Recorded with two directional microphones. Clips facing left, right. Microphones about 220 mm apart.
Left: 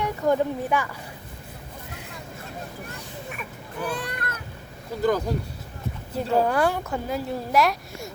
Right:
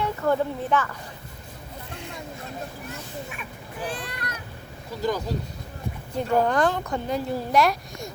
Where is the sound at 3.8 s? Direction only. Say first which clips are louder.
Left 3 dB; 60° left (ahead or behind).